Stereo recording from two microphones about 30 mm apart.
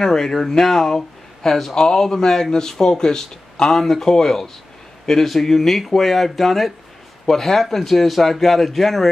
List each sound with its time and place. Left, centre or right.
0.0 s speech: centre
3.7 s speech: centre